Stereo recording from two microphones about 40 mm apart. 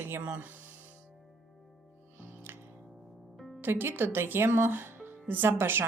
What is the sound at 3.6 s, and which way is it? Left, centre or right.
Speech, right.